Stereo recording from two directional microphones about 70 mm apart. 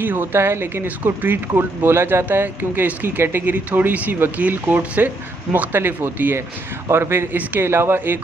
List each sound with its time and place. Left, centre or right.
0.0 s speech: right
0.8 s speech: right